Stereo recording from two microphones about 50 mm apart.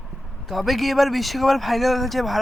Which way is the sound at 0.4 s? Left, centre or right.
Centre.